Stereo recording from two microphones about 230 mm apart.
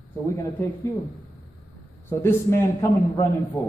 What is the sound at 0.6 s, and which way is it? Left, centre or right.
Speech, centre.